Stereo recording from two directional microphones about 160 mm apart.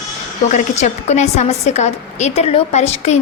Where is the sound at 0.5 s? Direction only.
45° left (ahead or behind).